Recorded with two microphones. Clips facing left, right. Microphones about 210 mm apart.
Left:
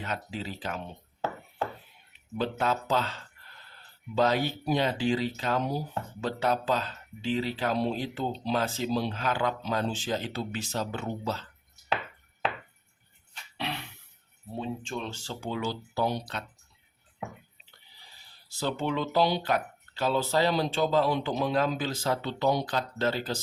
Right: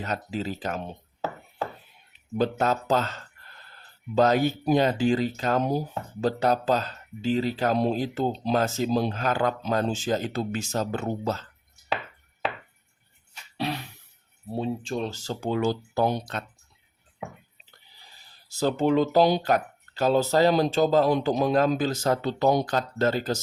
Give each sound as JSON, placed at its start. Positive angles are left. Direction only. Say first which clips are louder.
{"t": 0.0, "sound": "speech", "louder": "right 5 dB", "side_deg": -40}
{"t": 2.4, "sound": "speech", "louder": "right 4 dB", "side_deg": -45}
{"t": 6.1, "sound": "speech", "louder": "right 5 dB", "side_deg": -40}
{"t": 14.5, "sound": "speech", "louder": "right 6 dB", "side_deg": -35}
{"t": 18.4, "sound": "speech", "louder": "right 7 dB", "side_deg": -40}